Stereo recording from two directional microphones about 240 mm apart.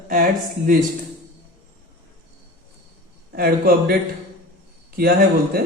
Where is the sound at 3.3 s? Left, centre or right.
Right.